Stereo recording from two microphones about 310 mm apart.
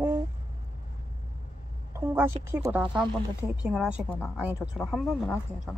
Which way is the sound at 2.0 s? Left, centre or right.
Centre.